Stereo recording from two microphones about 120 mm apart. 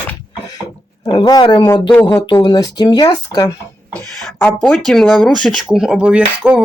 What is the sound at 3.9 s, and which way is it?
Speech, 5° left (ahead or behind).